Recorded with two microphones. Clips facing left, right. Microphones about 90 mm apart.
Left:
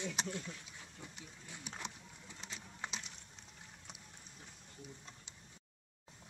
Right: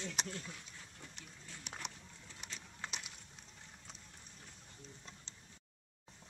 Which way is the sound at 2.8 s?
15° left (ahead or behind).